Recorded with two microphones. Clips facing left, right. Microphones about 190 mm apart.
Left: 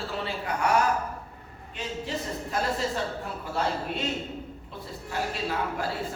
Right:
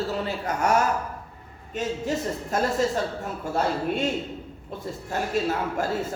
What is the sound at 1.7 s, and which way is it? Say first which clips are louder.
Speech: right 6 dB; 45° right (ahead or behind).